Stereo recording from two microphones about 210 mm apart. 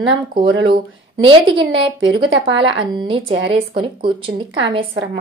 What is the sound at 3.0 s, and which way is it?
A woman's voice, 25° right (ahead or behind).